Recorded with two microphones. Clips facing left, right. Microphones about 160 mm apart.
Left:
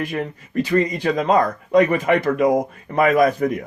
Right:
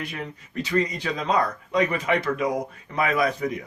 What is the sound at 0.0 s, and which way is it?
Speech, 50° left (ahead or behind).